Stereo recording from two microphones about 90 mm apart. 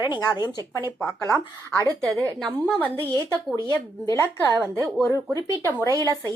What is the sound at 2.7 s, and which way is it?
Speech, 20° left (ahead or behind).